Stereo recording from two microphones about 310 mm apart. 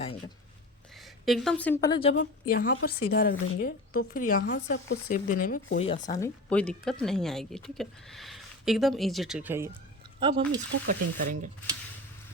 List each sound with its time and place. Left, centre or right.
1.2 s a woman's voice: centre; by 6.1 s left
6.1 s speech: centre
10.7 s speech: right